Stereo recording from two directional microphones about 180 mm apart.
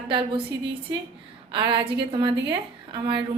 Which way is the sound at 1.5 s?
30° right (ahead or behind).